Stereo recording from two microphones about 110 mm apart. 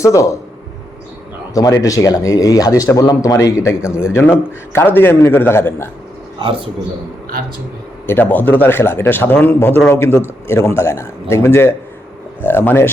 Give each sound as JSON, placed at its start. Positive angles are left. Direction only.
{"t": 0.0, "sound": "speech", "side_deg": 30}
{"t": 1.5, "sound": "speech", "side_deg": 30}
{"t": 6.4, "sound": "a man's voice", "side_deg": -55}
{"t": 8.0, "sound": "speech", "side_deg": 20}